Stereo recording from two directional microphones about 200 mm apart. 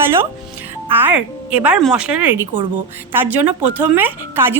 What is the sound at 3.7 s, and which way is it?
Speech, 10° right (ahead or behind).